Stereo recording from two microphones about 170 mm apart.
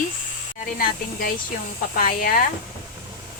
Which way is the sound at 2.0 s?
60° left (ahead or behind).